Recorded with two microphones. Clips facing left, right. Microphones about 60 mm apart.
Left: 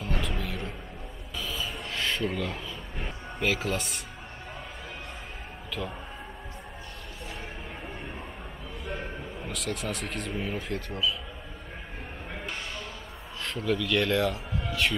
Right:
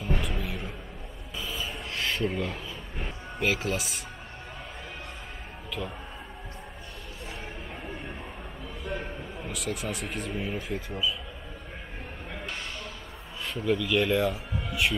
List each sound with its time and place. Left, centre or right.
0.0 s a sound: centre
5.7 s speech: centre
8.8 s speech: centre
13.4 s speech: centre